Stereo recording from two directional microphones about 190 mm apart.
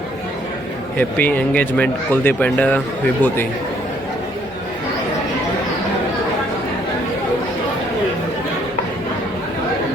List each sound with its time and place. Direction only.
0.9 s speech: 10° left (ahead or behind)